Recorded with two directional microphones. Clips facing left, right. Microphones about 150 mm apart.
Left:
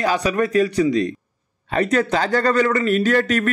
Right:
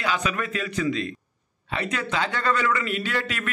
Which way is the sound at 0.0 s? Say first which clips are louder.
Left 8 dB; 40° left (ahead or behind).